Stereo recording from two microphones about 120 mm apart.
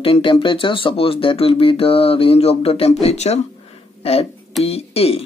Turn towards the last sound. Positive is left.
turn(degrees=55)  # may be behind; listen again after turning